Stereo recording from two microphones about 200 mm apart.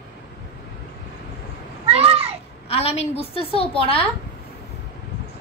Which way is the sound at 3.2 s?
30° left (ahead or behind).